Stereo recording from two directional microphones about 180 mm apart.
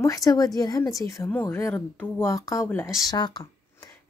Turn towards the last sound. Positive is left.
turn(degrees=20)  # may be behind; listen again after turning